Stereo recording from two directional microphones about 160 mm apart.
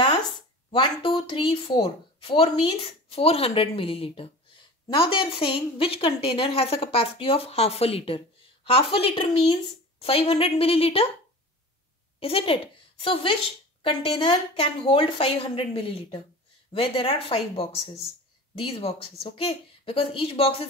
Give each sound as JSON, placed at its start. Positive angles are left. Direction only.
{"t": 0.7, "sound": "a woman's voice", "side_deg": 30}
{"t": 12.2, "sound": "a woman's voice", "side_deg": 35}